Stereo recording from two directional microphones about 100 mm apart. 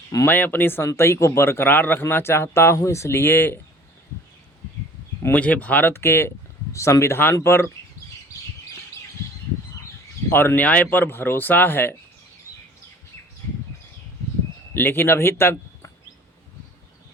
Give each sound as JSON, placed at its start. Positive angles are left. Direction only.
{"t": 0.3, "sound": "speech", "side_deg": 20}
{"t": 5.2, "sound": "speech", "side_deg": 15}
{"t": 10.2, "sound": "speech", "side_deg": 20}
{"t": 14.7, "sound": "speech", "side_deg": 20}